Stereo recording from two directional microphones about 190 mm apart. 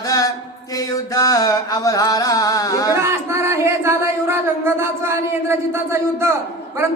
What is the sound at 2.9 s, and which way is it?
Speech, 15° right (ahead or behind).